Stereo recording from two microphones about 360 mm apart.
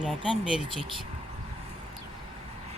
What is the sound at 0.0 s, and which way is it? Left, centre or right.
Speech, centre.